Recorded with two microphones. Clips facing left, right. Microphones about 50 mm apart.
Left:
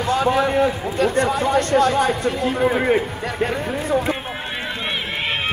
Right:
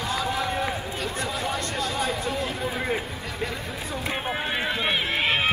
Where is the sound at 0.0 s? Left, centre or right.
Left.